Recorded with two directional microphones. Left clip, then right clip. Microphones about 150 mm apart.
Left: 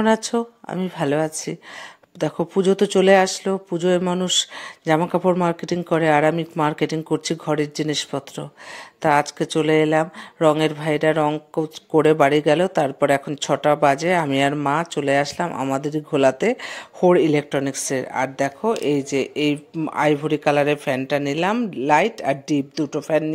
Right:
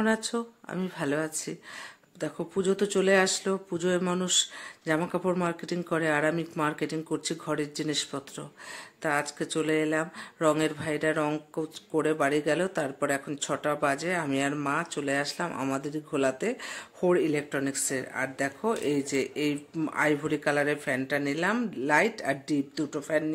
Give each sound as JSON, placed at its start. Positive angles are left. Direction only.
{"t": 0.0, "sound": "speech", "side_deg": 40}
{"t": 11.2, "sound": "speech", "side_deg": 25}
{"t": 11.9, "sound": "speech", "side_deg": 45}